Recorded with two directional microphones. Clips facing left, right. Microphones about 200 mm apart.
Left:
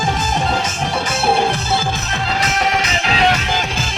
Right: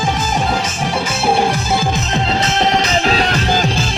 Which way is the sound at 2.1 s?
30° right (ahead or behind).